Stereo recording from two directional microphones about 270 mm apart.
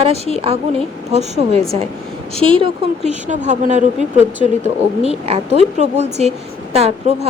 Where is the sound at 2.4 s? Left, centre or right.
Centre.